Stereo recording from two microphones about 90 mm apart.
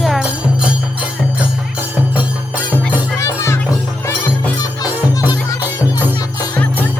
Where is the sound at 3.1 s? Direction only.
30° left (ahead or behind).